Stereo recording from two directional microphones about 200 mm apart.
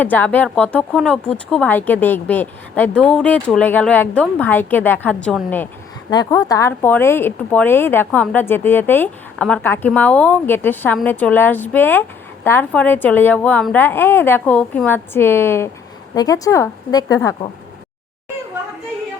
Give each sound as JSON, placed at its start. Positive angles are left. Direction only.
{"t": 0.0, "sound": "speech", "side_deg": 10}
{"t": 6.1, "sound": "speech", "side_deg": 20}